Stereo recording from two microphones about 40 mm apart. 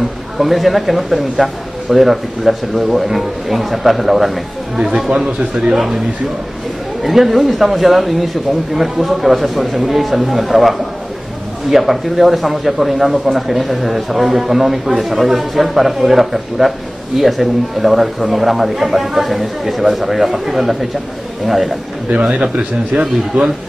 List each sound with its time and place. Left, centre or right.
0.4 s a man's voice: centre
5.7 s a man's voice: centre
22.6 s a man's voice: right